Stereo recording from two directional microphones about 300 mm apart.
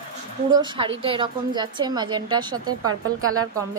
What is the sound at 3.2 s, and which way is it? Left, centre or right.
Speech, right.